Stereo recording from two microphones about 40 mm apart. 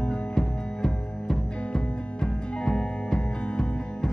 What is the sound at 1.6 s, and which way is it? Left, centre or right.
Music, left.